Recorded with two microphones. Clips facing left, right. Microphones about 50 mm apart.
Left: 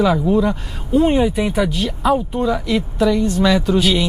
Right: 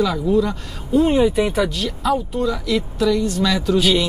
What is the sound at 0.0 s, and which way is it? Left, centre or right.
Speech, left.